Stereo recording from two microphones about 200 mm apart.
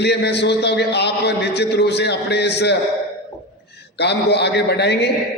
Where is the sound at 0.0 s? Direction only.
55° left (ahead or behind).